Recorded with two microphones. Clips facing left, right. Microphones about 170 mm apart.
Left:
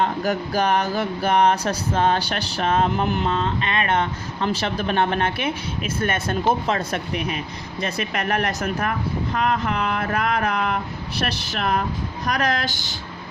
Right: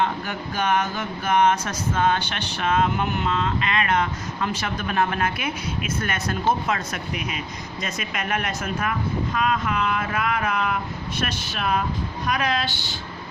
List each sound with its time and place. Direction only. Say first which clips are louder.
0.0 s speech: left 4 dB; 40° left (ahead or behind)
12.2 s speech: left 2 dB; 40° left (ahead or behind)